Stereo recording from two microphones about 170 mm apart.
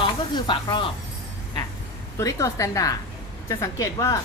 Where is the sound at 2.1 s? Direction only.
20° left (ahead or behind).